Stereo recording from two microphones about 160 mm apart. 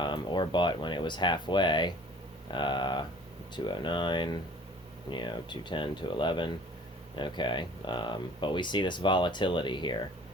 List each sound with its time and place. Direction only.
0.0 s speech: 30° left (ahead or behind)